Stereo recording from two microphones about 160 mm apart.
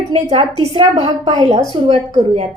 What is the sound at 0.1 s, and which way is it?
A woman's voice, 40° right (ahead or behind).